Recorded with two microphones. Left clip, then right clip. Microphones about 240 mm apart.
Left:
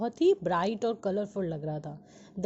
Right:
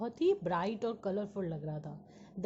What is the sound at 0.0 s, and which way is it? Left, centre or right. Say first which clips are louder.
A woman's voice: left 6 dB; centre.